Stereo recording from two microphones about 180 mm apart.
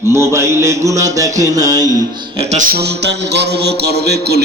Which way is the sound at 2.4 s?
40° right (ahead or behind).